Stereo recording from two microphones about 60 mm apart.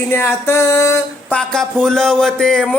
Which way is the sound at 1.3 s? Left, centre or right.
Centre.